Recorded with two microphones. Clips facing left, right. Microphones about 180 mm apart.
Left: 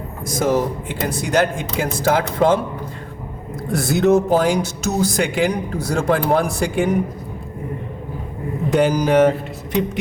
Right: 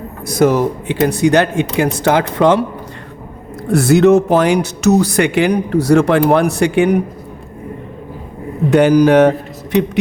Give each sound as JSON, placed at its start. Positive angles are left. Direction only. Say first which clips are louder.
{"t": 0.3, "sound": "speech", "louder": "right 6 dB", "side_deg": -65}
{"t": 3.7, "sound": "speech", "louder": "right 6 dB", "side_deg": -75}
{"t": 8.7, "sound": "speech", "louder": "right 7 dB", "side_deg": -65}